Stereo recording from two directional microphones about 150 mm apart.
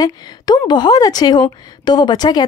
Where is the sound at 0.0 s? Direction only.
25° left (ahead or behind).